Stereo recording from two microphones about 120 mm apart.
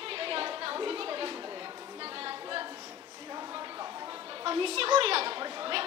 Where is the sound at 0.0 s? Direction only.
50° right (ahead or behind).